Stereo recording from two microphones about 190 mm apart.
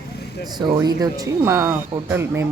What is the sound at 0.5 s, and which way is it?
Speech, 20° right (ahead or behind).